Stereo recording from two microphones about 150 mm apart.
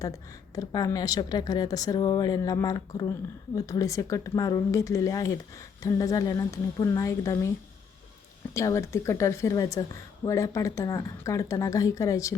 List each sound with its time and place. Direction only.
0.0 s a woman's voice: 20° left (ahead or behind)
8.5 s a woman's voice: 20° left (ahead or behind)